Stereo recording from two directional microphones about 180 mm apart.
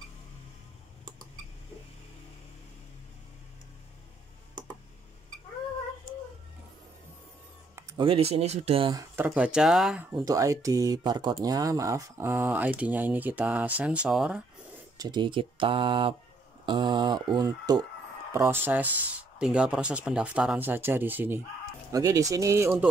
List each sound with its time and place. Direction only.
8.0 s speech: 30° right (ahead or behind)
9.1 s speech: 10° right (ahead or behind)
10.1 s speech: 20° right (ahead or behind)
15.0 s speech: 25° right (ahead or behind)